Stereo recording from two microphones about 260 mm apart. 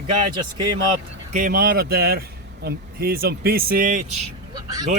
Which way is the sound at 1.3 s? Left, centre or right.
Right.